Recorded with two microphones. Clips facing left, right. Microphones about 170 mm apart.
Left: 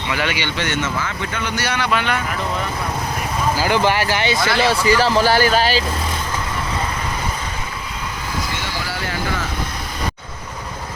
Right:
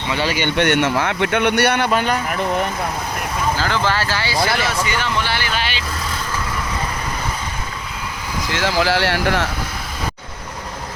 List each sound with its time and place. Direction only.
0.1 s speech: 30° right (ahead or behind)
0.3 s speech: 55° right (ahead or behind)
1.9 s speech: 40° right (ahead or behind)
3.6 s speech: 15° left (ahead or behind)
4.6 s a man's voice: 35° left (ahead or behind)
8.5 s speech: 90° right